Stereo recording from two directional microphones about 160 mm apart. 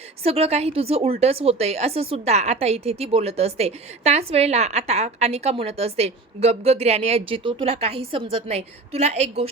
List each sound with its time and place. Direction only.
0.2 s a woman's voice: 40° right (ahead or behind)